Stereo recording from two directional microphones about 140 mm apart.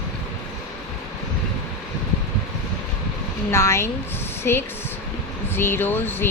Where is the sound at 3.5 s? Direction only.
20° left (ahead or behind).